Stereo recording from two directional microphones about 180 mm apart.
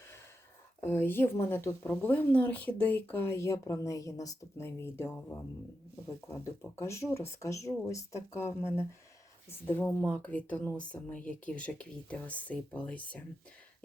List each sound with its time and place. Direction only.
0.9 s speech: 10° left (ahead or behind)
6.4 s speech: 15° left (ahead or behind)